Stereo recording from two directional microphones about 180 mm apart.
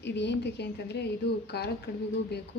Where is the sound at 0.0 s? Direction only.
75° left (ahead or behind).